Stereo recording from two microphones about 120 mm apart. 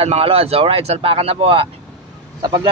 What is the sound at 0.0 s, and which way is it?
Speech, 55° right (ahead or behind).